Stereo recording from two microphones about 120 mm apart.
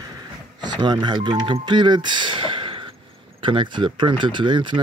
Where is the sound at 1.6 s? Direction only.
40° right (ahead or behind).